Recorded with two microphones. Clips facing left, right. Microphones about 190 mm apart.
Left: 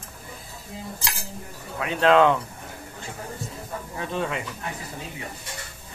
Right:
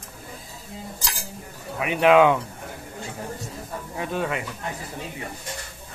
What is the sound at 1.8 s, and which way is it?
Speech, 15° right (ahead or behind).